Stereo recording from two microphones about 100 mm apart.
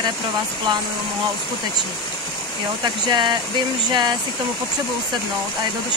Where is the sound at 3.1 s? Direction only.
50° right (ahead or behind).